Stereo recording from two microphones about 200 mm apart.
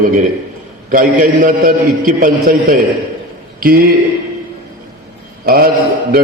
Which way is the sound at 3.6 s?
45° right (ahead or behind).